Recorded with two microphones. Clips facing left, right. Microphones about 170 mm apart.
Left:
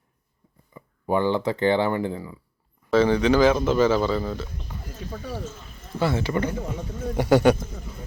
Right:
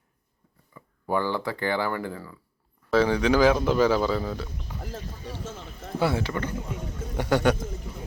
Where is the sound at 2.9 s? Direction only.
5° right (ahead or behind).